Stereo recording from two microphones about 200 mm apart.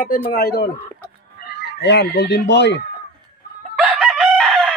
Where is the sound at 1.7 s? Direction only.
60° left (ahead or behind).